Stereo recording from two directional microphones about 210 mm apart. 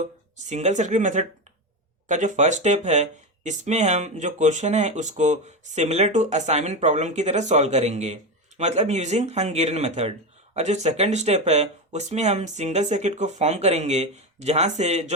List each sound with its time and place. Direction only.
0.0 s speech: 35° right (ahead or behind)